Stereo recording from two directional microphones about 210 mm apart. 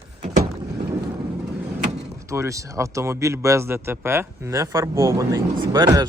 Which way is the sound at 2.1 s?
15° right (ahead or behind).